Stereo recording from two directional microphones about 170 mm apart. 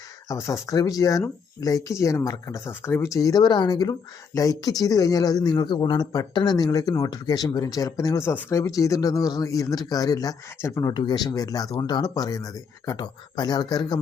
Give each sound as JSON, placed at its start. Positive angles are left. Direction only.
{"t": 0.3, "sound": "speech", "side_deg": 20}